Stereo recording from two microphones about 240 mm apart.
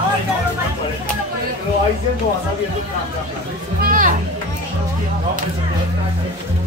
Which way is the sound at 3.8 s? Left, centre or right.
Right.